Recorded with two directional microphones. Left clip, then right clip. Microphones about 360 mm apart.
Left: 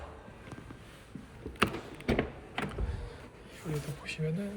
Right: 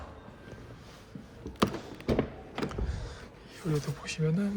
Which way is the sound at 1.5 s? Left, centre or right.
Centre.